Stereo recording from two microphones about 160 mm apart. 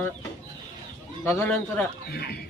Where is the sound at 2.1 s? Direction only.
90° left.